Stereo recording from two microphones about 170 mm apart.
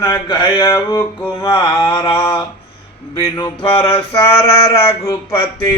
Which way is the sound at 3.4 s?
30° left (ahead or behind).